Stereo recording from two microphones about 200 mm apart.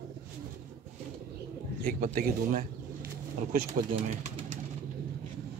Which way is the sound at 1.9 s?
45° right (ahead or behind).